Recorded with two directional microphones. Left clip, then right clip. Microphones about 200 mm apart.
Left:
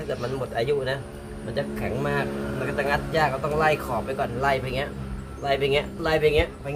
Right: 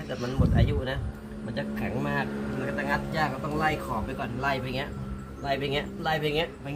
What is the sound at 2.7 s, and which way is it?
Speech, 40° left (ahead or behind).